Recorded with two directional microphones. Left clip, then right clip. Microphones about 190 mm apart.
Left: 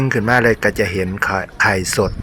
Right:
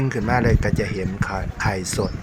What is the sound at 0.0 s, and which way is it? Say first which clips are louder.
Speech: left 7 dB; 20° left (ahead or behind).